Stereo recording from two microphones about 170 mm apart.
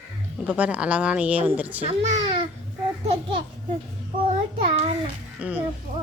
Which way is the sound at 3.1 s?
30° right (ahead or behind).